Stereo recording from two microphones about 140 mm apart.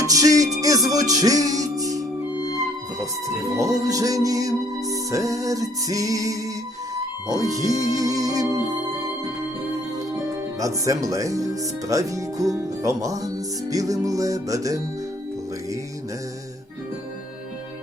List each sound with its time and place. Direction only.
0.0 s speech: 25° right (ahead or behind)
0.9 s music: 25° right (ahead or behind)
6.9 s speech: 25° right (ahead or behind)
10.6 s speech: 25° right (ahead or behind)